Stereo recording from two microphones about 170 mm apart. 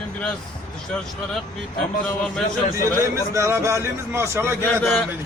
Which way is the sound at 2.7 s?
15° right (ahead or behind).